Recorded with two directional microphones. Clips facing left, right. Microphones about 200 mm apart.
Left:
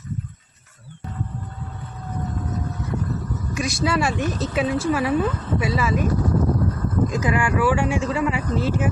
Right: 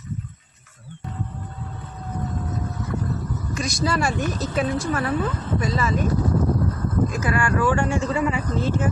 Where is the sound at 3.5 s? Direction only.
5° left (ahead or behind).